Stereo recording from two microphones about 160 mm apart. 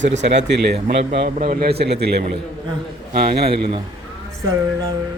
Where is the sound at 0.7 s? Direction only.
40° right (ahead or behind).